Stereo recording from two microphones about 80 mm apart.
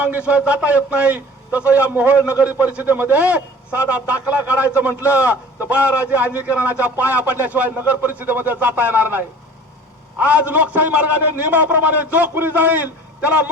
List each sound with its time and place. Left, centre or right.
0.0 s a man's voice: centre